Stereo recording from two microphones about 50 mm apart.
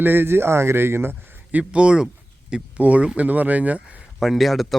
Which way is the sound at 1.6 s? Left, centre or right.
Right.